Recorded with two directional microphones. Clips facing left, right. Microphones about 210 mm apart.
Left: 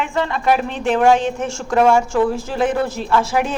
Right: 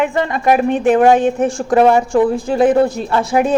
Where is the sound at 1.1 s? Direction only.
55° right (ahead or behind).